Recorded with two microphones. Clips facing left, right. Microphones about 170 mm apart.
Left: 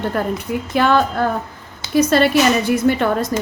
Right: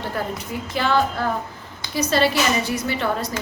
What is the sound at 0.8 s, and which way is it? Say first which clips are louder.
A woman's voice: left 5 dB; 55° left (ahead or behind).